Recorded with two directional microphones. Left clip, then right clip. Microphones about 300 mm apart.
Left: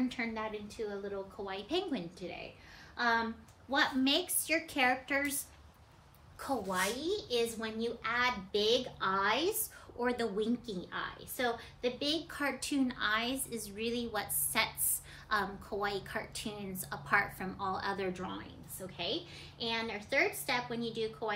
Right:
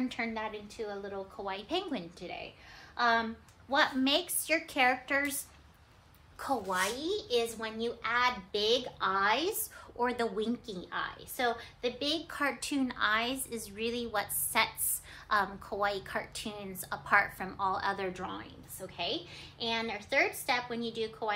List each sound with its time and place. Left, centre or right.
0.1 s a child's voice: centre
6.4 s a child's voice: centre